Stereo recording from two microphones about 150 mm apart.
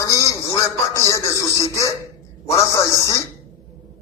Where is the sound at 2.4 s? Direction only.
20° left (ahead or behind).